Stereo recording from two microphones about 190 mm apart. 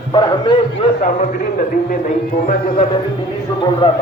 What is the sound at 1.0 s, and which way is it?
A man's voice, 45° left (ahead or behind).